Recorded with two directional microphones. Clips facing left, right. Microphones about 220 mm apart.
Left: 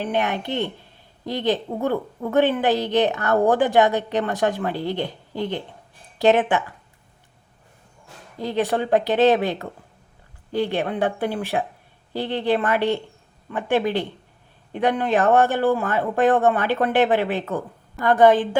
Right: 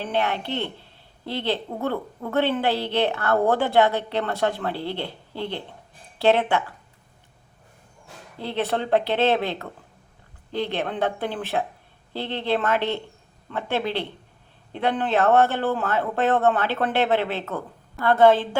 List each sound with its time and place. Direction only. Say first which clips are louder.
0.0 s speech: left 2 dB; 15° left (ahead or behind)
8.4 s speech: left 3 dB; 15° left (ahead or behind)